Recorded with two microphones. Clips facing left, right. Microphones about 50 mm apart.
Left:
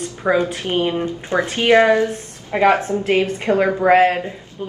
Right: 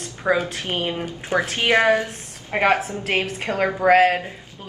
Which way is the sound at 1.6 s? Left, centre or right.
Centre.